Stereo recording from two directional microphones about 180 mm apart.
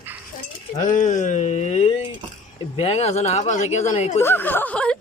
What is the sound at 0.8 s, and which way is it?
Speech, 45° left (ahead or behind).